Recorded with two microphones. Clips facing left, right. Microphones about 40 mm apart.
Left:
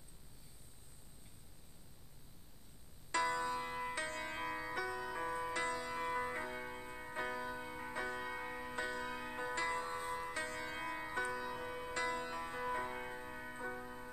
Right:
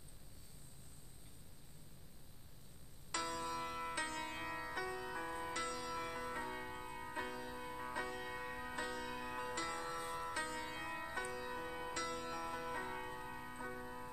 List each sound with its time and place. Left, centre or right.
3.1 s music: left
3.9 s music: centre; by 6.5 s left
6.5 s music: centre
10.0 s music: centre
11.9 s music: left; by 14.1 s centre